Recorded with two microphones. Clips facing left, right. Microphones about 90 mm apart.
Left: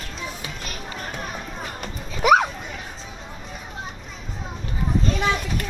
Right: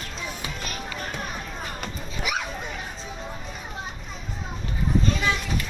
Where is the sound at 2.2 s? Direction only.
55° left (ahead or behind).